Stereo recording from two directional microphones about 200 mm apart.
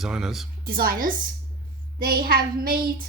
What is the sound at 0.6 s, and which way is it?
A woman's voice, 45° right (ahead or behind).